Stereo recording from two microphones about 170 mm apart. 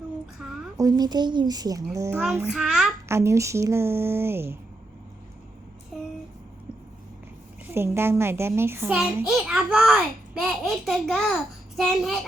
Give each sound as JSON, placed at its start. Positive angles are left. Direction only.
{"t": 0.4, "sound": "a sound", "side_deg": -5}
{"t": 0.8, "sound": "a child's voice", "side_deg": -20}
{"t": 2.3, "sound": "a child's voice", "side_deg": -5}
{"t": 3.1, "sound": "a child's voice", "side_deg": -15}
{"t": 7.7, "sound": "a child's voice", "side_deg": -15}